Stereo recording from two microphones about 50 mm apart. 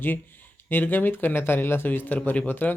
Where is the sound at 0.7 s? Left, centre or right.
Left.